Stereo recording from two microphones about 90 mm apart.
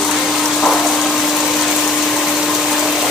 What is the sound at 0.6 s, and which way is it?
Water, 5° left (ahead or behind).